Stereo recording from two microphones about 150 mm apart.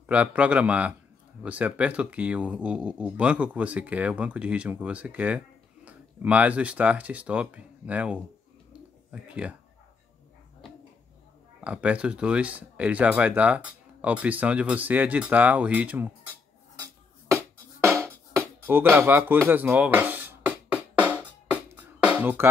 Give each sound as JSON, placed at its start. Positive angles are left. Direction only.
{"t": 0.0, "sound": "speech", "side_deg": -10}
{"t": 11.6, "sound": "speech", "side_deg": -10}
{"t": 16.8, "sound": "music", "side_deg": -20}